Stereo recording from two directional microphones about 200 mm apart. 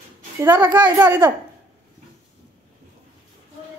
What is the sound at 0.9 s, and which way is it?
Speech, 10° right (ahead or behind).